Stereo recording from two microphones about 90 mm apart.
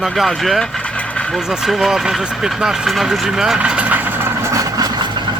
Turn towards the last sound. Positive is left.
turn(degrees=-50)  # may be behind; listen again after turning